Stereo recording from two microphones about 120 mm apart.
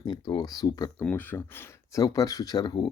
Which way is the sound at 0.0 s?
35° left (ahead or behind).